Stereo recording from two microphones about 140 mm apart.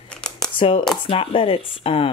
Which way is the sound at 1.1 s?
40° left (ahead or behind).